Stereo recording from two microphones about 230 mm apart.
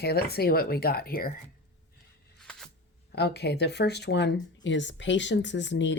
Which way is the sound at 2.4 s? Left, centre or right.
Centre.